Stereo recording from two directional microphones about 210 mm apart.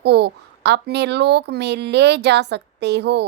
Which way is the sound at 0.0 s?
50° right (ahead or behind).